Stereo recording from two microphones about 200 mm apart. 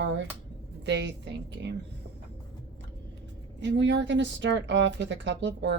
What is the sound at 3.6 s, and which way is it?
A woman's voice, 65° right (ahead or behind).